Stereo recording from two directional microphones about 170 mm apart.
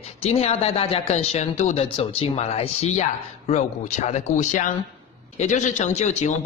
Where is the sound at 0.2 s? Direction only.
35° left (ahead or behind).